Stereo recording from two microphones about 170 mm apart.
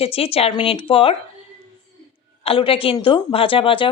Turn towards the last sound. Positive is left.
turn(degrees=30)  # may be behind; listen again after turning